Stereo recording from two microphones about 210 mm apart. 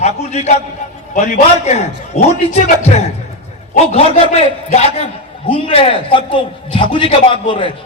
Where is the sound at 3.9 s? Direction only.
30° left (ahead or behind).